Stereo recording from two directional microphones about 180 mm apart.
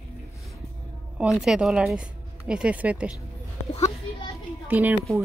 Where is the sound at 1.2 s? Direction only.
5° right (ahead or behind).